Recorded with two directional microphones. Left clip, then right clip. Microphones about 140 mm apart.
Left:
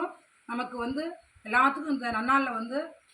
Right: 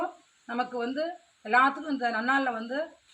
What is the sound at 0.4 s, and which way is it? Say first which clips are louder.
A woman's voice: right 2 dB; 15° right (ahead or behind).